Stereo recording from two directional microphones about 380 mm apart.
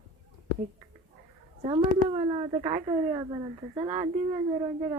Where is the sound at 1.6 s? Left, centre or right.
Centre.